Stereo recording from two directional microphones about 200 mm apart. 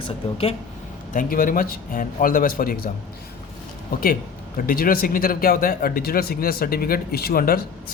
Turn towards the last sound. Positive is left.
turn(degrees=45)  # may be behind; listen again after turning